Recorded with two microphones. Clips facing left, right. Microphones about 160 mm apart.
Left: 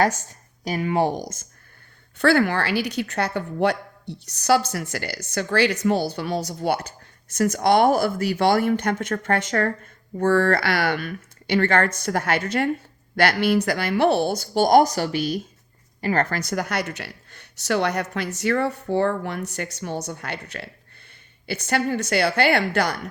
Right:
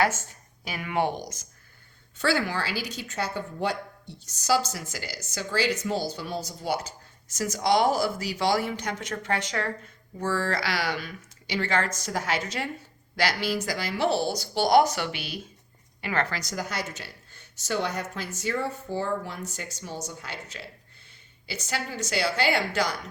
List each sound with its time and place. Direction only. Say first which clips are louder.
0.6 s speech: left 6 dB; 35° left (ahead or behind)
2.1 s speech: left 7 dB; 60° left (ahead or behind)